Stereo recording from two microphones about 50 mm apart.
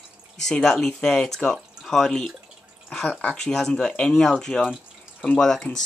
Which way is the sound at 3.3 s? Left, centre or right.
Centre.